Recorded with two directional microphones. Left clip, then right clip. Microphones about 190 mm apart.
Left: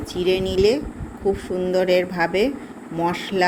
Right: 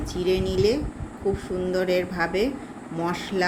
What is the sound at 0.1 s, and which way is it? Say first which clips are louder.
Speech: left 4 dB; 25° right (ahead or behind).